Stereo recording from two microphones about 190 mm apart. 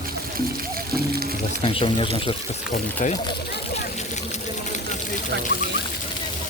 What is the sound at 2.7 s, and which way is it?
Speech, 40° left (ahead or behind).